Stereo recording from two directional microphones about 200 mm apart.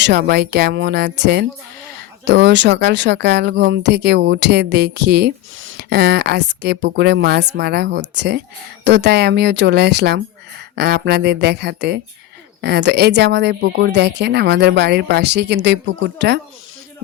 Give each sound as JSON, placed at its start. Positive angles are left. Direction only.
{"t": 0.0, "sound": "speech", "side_deg": -55}